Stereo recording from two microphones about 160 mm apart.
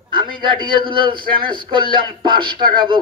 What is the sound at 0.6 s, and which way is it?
A man's voice, 30° right (ahead or behind).